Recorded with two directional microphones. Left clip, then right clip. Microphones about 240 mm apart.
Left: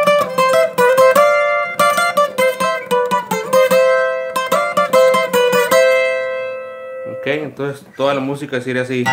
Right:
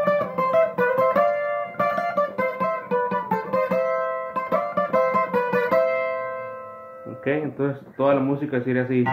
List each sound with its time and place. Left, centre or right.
0.0 s music: left
7.2 s speech: left